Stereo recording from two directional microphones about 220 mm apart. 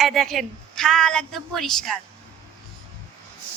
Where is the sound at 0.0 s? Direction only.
Centre (ahead or behind).